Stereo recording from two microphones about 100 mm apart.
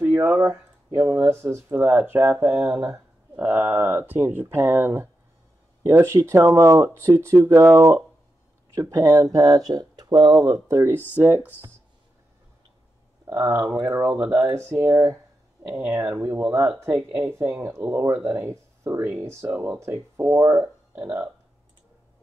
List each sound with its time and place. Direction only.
0.1 s speech: 20° right (ahead or behind); by 10.4 s 50° right (ahead or behind)
10.4 s speech: 30° right (ahead or behind)
13.2 s speech: 25° right (ahead or behind)